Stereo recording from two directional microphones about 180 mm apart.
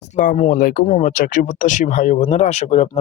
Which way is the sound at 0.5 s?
50° left (ahead or behind).